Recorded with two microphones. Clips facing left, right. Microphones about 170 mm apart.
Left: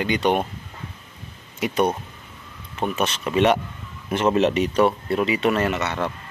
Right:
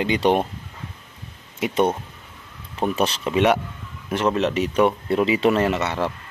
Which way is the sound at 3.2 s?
10° right (ahead or behind).